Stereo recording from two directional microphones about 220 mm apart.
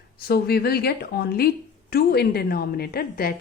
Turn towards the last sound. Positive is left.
turn(degrees=45)  # may be behind; listen again after turning